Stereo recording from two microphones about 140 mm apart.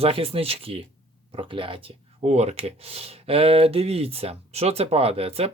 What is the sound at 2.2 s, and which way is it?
Speech, 55° right (ahead or behind).